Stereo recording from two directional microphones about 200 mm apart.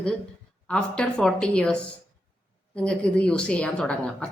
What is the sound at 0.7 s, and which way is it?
A woman's voice, 5° left (ahead or behind).